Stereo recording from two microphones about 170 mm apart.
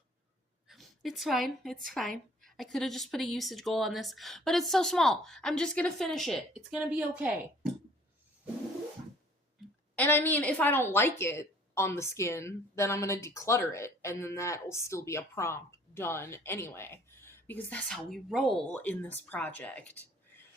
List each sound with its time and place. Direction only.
0.7 s speech: centre (ahead or behind)
9.9 s a woman's voice: 10° left (ahead or behind)